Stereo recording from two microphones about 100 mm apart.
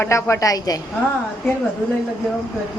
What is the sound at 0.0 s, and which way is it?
Speech, 25° left (ahead or behind).